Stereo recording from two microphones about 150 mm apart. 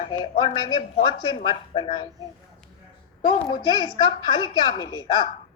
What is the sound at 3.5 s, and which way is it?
A woman's voice, 30° left (ahead or behind).